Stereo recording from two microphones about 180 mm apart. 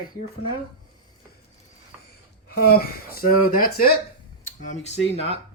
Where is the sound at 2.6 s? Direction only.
55° left (ahead or behind).